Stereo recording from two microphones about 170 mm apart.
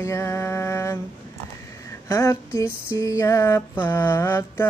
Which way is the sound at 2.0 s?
20° left (ahead or behind).